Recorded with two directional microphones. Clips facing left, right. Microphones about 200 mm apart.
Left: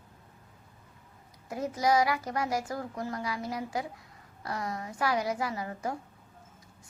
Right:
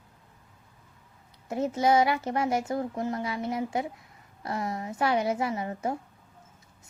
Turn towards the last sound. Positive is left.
turn(degrees=-25)  # may be behind; listen again after turning